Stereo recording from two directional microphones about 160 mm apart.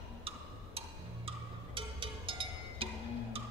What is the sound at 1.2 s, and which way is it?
Music, 30° right (ahead or behind).